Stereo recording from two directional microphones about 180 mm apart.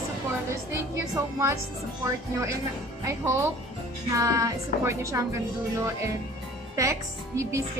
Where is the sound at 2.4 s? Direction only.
15° right (ahead or behind).